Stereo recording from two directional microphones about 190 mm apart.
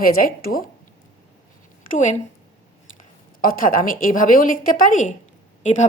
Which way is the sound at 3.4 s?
45° left (ahead or behind).